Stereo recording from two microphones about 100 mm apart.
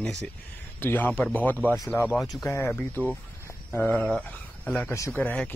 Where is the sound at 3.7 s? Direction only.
15° left (ahead or behind).